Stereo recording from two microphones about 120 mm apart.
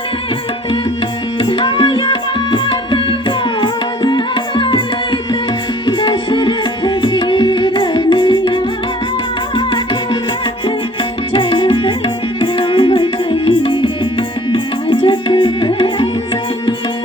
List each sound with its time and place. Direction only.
1.4 s tabla: 45° left (ahead or behind)
5.8 s music: 40° left (ahead or behind)
11.3 s music: 45° left (ahead or behind)